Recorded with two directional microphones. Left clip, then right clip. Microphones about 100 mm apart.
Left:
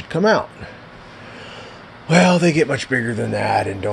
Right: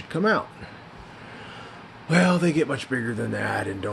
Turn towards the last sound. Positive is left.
turn(degrees=15)  # may be behind; listen again after turning